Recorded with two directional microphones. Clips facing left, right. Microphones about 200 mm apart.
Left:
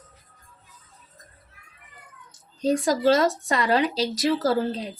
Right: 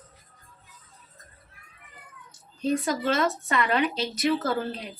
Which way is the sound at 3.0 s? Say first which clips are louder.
Left 6 dB; 35° left (ahead or behind).